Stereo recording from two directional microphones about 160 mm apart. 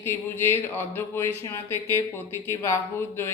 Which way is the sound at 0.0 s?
15° left (ahead or behind).